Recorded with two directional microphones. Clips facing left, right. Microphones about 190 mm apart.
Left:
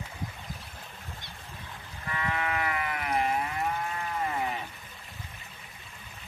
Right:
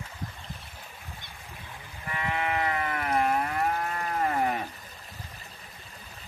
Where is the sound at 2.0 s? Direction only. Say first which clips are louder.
Right 1 dB; 20° right (ahead or behind); by 4.6 s 55° right (ahead or behind).